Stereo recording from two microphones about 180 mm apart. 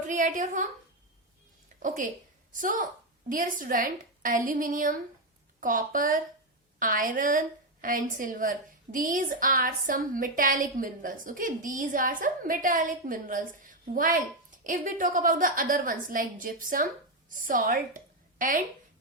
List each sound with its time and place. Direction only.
0.1 s a woman's voice: 45° right (ahead or behind)
1.8 s a woman's voice: 45° right (ahead or behind)